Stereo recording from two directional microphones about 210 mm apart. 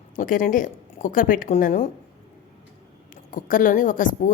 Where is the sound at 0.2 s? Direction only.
40° left (ahead or behind).